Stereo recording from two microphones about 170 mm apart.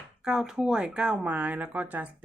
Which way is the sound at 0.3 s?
5° right (ahead or behind).